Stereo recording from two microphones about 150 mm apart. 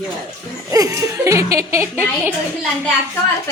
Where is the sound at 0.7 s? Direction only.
20° right (ahead or behind).